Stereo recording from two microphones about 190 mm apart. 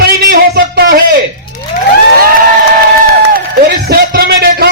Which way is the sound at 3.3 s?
50° right (ahead or behind).